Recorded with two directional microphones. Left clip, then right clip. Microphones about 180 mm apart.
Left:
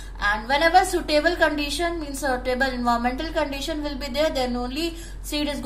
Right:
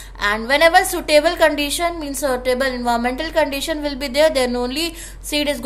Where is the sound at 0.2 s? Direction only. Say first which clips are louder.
Right 6 dB; 35° right (ahead or behind).